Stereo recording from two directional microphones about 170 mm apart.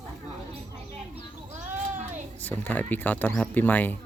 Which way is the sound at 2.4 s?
10° left (ahead or behind).